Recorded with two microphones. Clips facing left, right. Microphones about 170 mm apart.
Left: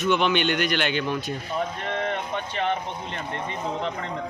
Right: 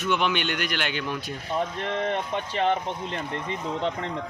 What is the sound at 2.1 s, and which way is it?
Speech, 30° right (ahead or behind).